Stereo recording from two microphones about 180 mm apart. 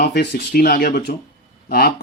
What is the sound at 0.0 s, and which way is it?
Speech, 65° left (ahead or behind).